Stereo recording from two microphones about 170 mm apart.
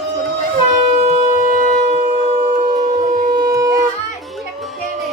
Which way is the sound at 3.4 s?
20° right (ahead or behind).